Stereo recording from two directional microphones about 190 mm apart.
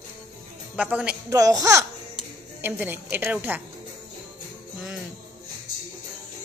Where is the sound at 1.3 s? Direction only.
20° right (ahead or behind).